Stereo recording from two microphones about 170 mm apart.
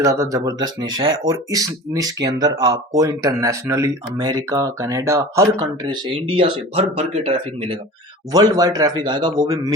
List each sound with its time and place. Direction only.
0.0 s speech: 15° right (ahead or behind); by 7.8 s 35° right (ahead or behind)
8.3 s speech: 20° right (ahead or behind)